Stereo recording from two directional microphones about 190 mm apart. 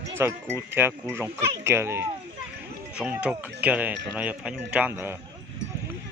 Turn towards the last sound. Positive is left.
turn(degrees=-10)  # may be behind; listen again after turning